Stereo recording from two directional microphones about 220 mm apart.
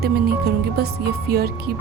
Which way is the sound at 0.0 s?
45° right (ahead or behind).